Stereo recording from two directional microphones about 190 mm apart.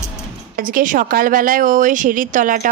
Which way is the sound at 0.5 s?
45° right (ahead or behind).